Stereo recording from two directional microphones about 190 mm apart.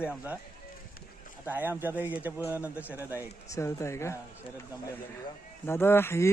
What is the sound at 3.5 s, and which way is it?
Speech, 15° left (ahead or behind).